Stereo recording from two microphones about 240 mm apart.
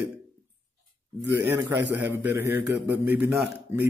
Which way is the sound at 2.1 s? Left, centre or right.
Centre.